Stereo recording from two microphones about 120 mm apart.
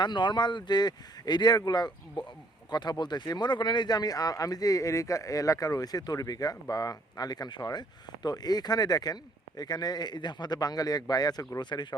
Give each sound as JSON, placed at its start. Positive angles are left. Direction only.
{"t": 0.0, "sound": "speech", "side_deg": 40}